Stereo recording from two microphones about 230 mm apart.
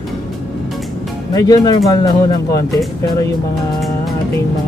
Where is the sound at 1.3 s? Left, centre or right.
Centre.